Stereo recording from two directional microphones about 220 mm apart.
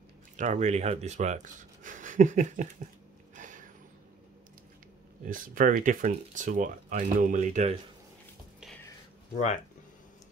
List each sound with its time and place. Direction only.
0.4 s speech: 35° right (ahead or behind)
3.3 s a sound: 35° right (ahead or behind)
5.2 s speech: 40° right (ahead or behind)